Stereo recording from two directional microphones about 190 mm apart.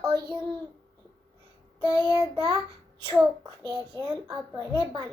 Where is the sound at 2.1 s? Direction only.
25° right (ahead or behind).